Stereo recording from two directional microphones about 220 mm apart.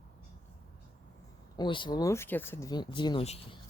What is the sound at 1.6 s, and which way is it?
Speech, 20° left (ahead or behind).